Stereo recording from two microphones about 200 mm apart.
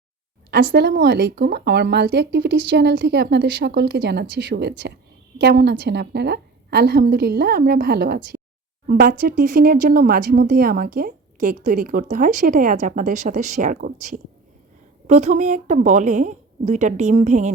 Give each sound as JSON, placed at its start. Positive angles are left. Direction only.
{"t": 0.5, "sound": "a woman's voice", "side_deg": -55}